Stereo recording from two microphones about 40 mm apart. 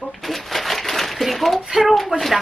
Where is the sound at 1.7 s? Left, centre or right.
Centre.